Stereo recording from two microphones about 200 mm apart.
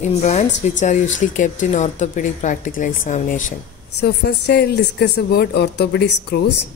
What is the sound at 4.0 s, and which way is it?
A woman's voice, 55° left (ahead or behind).